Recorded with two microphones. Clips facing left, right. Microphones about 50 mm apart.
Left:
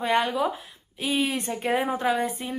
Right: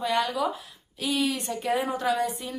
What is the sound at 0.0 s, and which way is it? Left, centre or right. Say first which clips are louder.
A woman's voice: left 2 dB; left.